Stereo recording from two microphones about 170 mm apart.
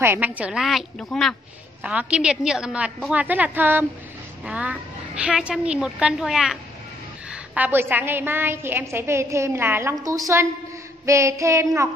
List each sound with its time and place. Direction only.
0.0 s a woman's voice: 10° right (ahead or behind)